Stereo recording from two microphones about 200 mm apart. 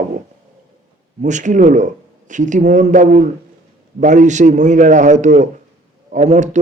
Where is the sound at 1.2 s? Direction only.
40° right (ahead or behind).